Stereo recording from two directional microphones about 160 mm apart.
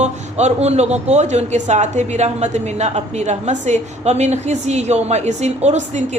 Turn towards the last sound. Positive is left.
turn(degrees=-45)  # may be behind; listen again after turning